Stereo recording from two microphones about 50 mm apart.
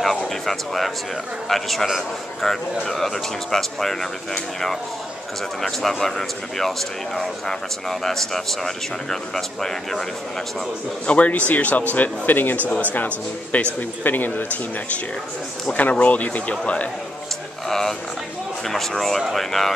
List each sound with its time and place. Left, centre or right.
0.0 s speech: centre
11.1 s speech: left
13.7 s speech: left
15.7 s speech: left
17.6 s speech: centre